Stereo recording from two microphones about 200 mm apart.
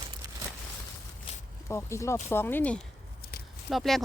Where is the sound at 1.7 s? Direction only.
15° left (ahead or behind).